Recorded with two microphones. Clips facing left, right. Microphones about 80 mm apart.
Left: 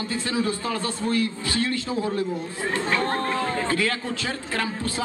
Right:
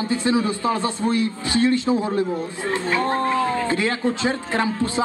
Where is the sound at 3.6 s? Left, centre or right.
Right.